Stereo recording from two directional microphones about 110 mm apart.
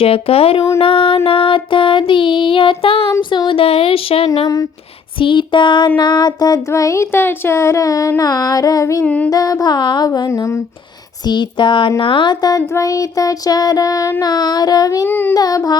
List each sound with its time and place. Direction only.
0.0 s speech: 60° left (ahead or behind)
0.8 s music: 55° left (ahead or behind)
3.2 s music: 45° left (ahead or behind)
3.6 s speech: 60° left (ahead or behind)
5.2 s music: 50° left (ahead or behind)
6.0 s a sound: 40° left (ahead or behind)
8.2 s child singing: 35° left (ahead or behind)
9.0 s music: 15° left (ahead or behind)
9.3 s child singing: 35° left (ahead or behind)
11.3 s music: 45° left (ahead or behind)
11.9 s child singing: 50° left (ahead or behind); by 15.0 s 35° left (ahead or behind)
15.0 s a sound: 20° left (ahead or behind)
15.4 s child singing: 35° left (ahead or behind)